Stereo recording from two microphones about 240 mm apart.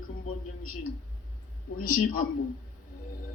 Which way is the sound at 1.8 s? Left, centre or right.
Left.